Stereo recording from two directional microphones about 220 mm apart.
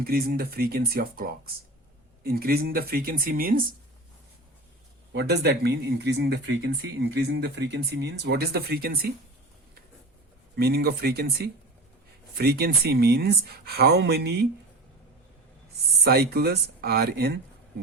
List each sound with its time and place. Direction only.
0.0 s speech: 45° right (ahead or behind)
5.1 s speech: 50° right (ahead or behind)
10.5 s speech: 50° right (ahead or behind)
16.0 s speech: 45° right (ahead or behind)